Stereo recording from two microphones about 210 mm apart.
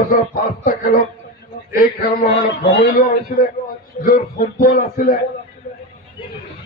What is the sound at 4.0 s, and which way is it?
A man's voice, 40° left (ahead or behind).